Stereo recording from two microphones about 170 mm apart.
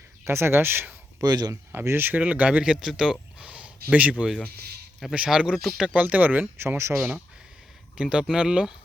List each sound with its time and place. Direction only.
0.3 s speech: 15° right (ahead or behind)
1.2 s speech: 25° right (ahead or behind); by 4.4 s centre (ahead or behind)
4.5 s a sound: 70° right (ahead or behind)
4.9 s speech: 5° right (ahead or behind)